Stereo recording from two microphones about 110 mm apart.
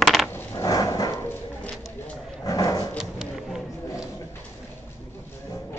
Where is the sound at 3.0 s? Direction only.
5° right (ahead or behind).